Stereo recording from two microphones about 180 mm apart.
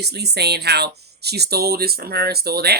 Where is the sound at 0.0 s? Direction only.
65° right (ahead or behind).